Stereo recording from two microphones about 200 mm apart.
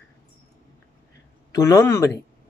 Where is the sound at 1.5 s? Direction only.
15° left (ahead or behind).